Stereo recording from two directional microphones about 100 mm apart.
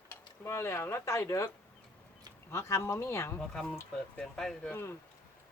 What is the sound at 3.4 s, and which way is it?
Speech, 5° left (ahead or behind).